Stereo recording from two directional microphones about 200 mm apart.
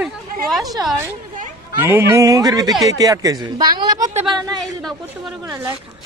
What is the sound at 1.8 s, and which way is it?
A man's voice, 10° right (ahead or behind).